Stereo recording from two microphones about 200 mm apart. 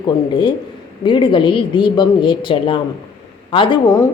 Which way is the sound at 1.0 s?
25° left (ahead or behind).